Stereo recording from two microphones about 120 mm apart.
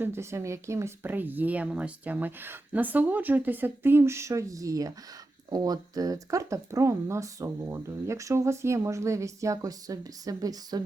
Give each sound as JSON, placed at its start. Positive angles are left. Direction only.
{"t": 0.0, "sound": "speech", "side_deg": -20}